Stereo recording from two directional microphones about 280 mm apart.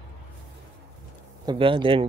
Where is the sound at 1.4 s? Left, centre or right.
Centre.